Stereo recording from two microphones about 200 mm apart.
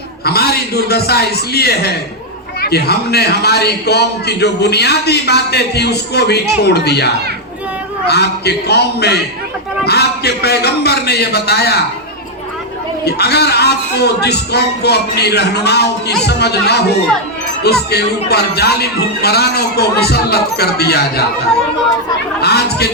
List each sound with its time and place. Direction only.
0.3 s a man's voice: 50° left (ahead or behind)
13.1 s a man's voice: 55° left (ahead or behind)
22.4 s speech: 55° left (ahead or behind)